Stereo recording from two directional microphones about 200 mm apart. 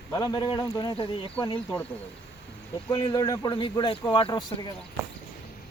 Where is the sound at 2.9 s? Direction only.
20° left (ahead or behind).